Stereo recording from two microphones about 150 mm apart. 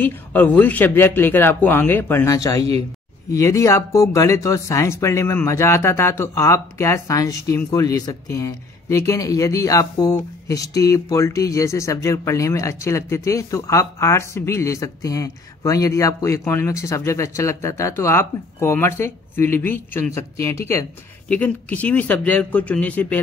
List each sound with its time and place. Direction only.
0.0 s speech: 10° left (ahead or behind)